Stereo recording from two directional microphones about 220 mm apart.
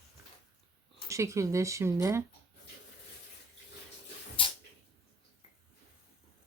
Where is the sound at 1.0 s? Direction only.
15° right (ahead or behind).